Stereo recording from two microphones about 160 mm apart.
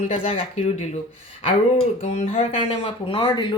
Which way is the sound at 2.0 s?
40° left (ahead or behind).